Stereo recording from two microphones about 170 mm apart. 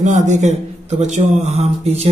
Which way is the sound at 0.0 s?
45° right (ahead or behind).